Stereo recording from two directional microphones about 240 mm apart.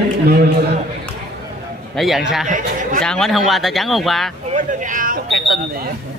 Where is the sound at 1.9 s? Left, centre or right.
Centre.